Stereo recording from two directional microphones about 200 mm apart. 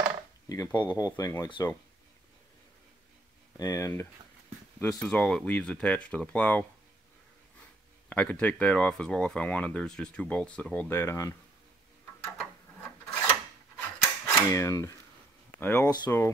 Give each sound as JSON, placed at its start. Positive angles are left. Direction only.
{"t": 0.5, "sound": "speech", "side_deg": 15}
{"t": 3.5, "sound": "speech", "side_deg": 20}
{"t": 4.7, "sound": "speech", "side_deg": 5}
{"t": 8.1, "sound": "speech", "side_deg": 5}
{"t": 13.7, "sound": "a sound", "side_deg": 15}
{"t": 15.6, "sound": "speech", "side_deg": 10}